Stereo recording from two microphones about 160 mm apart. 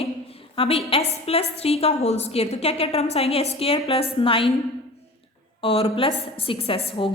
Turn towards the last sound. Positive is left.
turn(degrees=35)  # may be behind; listen again after turning